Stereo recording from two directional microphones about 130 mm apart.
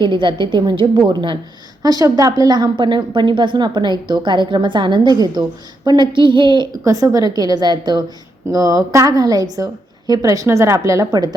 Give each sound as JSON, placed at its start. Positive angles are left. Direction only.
{"t": 0.0, "sound": "a woman's voice", "side_deg": -35}
{"t": 6.8, "sound": "a woman's voice", "side_deg": -25}